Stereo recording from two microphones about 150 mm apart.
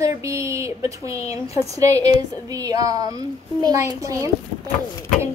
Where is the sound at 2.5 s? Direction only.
25° right (ahead or behind).